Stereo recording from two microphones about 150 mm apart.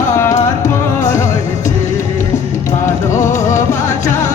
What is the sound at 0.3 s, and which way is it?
Music, 55° left (ahead or behind).